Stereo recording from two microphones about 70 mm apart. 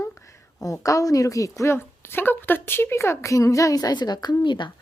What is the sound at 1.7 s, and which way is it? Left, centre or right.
A woman's voice, left.